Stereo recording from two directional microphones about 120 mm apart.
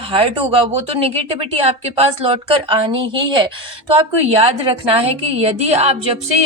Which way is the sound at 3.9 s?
55° right (ahead or behind).